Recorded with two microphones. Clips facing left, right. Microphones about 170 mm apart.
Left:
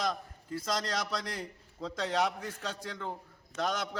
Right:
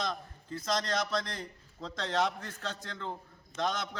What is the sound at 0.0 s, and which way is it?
A man's voice, 10° left (ahead or behind).